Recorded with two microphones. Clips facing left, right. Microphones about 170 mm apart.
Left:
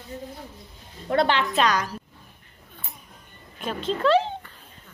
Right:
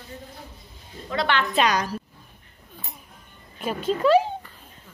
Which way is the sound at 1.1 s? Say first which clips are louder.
Left 6 dB; 55° left (ahead or behind).